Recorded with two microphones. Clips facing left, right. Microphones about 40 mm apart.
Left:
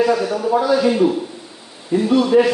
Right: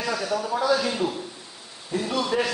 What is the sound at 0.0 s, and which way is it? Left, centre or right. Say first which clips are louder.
A man's voice: left 9 dB; centre.